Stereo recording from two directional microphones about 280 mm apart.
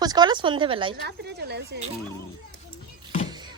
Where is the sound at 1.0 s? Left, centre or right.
Right.